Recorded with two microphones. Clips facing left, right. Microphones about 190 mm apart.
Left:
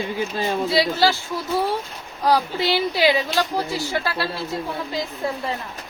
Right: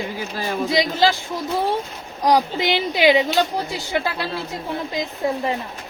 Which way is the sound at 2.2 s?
15° right (ahead or behind).